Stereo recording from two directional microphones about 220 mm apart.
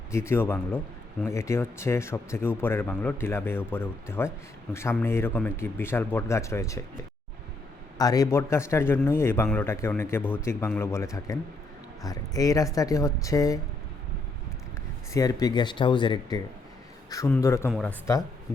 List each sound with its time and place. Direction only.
0.1 s a man's voice: 10° left (ahead or behind)
7.9 s a man's voice: 15° left (ahead or behind)
15.1 s a man's voice: 15° left (ahead or behind)
17.7 s speech: centre (ahead or behind)